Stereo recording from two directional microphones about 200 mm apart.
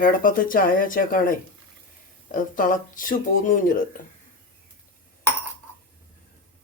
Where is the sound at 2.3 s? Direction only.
40° left (ahead or behind).